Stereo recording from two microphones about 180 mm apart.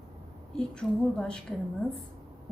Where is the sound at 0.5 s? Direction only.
5° left (ahead or behind).